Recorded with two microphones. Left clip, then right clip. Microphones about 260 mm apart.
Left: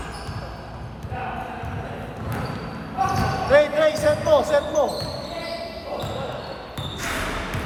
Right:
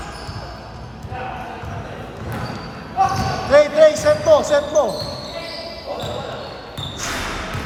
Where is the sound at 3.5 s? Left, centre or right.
Right.